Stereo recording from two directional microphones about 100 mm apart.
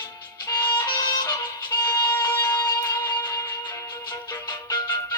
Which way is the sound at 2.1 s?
20° left (ahead or behind).